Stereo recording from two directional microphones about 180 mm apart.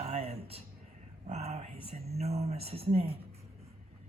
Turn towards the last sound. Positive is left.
turn(degrees=-35)  # may be behind; listen again after turning